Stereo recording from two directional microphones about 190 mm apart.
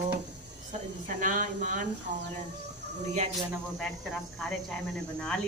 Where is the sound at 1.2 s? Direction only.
45° right (ahead or behind).